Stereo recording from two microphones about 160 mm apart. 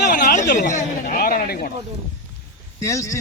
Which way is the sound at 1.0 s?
70° left (ahead or behind).